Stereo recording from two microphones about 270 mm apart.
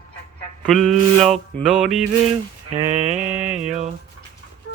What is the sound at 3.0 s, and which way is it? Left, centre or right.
Mantra, right.